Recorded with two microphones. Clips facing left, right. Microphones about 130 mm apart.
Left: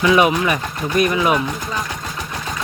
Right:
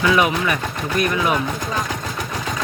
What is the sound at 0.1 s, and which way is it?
Speech, 20° left (ahead or behind).